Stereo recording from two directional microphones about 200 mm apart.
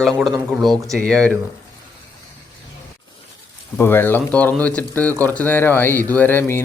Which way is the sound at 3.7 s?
10° left (ahead or behind).